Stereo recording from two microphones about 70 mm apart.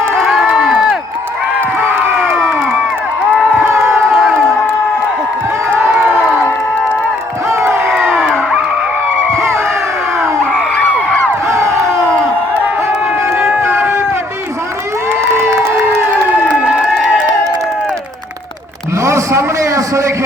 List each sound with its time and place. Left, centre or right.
0.4 s crowd: centre
1.8 s crowd: right
3.6 s crowd: right
4.1 s crowd: centre
7.5 s crowd: right
8.0 s a sound: centre
11.4 s crowd: right
13.2 s a sound: right
16.6 s crowd: centre
19.0 s a sound: right